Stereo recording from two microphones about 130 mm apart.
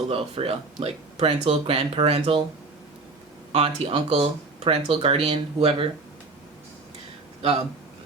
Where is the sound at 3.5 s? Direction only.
50° right (ahead or behind).